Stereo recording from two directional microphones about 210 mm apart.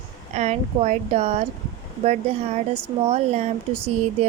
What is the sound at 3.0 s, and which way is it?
Speech, 30° right (ahead or behind).